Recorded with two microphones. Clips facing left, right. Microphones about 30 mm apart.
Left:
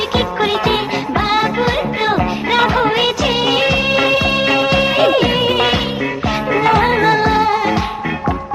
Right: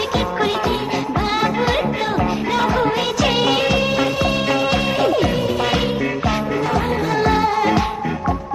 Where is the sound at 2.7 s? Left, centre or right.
Left.